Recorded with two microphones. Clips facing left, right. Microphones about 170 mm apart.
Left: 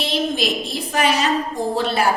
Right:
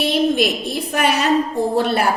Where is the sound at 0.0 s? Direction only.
60° right (ahead or behind).